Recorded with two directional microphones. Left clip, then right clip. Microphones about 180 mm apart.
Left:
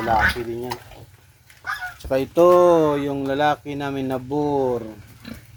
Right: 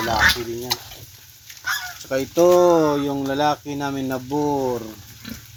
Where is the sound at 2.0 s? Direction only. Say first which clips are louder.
Left 3 dB; 5° left (ahead or behind).